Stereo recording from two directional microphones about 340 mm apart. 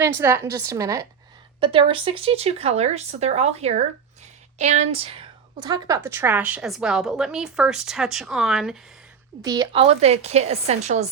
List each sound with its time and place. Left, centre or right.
0.0 s a woman's voice: centre
9.4 s a woman's voice: centre